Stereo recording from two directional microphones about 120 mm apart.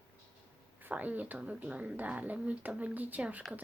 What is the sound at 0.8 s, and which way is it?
Speech, 15° right (ahead or behind).